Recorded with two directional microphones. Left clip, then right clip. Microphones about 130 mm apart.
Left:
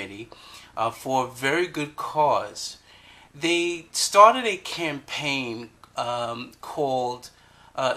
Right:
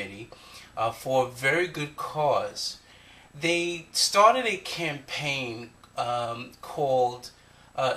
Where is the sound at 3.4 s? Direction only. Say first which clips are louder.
Left 3 dB; 15° left (ahead or behind).